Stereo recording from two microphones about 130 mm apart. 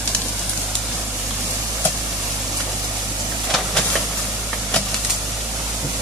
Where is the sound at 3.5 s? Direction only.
5° left (ahead or behind).